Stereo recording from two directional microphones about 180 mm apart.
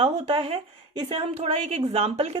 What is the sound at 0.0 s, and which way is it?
A woman's voice, 30° right (ahead or behind).